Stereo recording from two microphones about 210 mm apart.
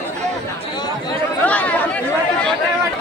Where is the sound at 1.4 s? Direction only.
5° left (ahead or behind).